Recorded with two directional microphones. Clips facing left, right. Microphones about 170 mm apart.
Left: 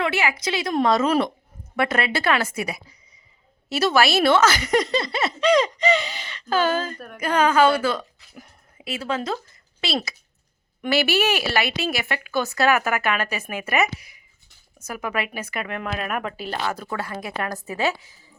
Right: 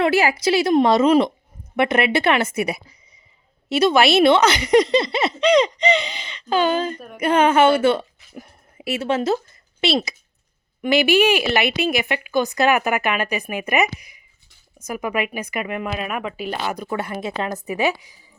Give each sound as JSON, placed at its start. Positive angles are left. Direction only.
{"t": 0.0, "sound": "a woman's voice", "side_deg": -35}
{"t": 10.8, "sound": "speech", "side_deg": -15}